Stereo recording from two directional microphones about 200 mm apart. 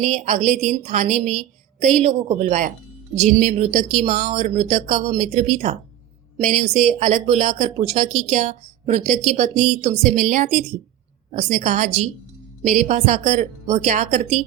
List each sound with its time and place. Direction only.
0.0 s speech: 35° right (ahead or behind)